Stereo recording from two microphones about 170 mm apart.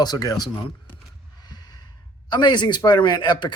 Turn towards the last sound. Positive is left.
turn(degrees=25)  # may be behind; listen again after turning